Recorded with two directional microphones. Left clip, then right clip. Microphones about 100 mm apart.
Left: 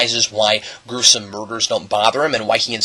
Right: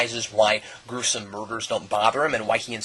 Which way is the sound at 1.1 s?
10° left (ahead or behind).